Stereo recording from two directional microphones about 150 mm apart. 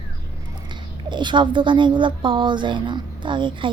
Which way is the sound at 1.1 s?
30° right (ahead or behind).